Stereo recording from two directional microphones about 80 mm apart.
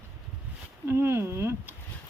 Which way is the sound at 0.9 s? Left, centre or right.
Right.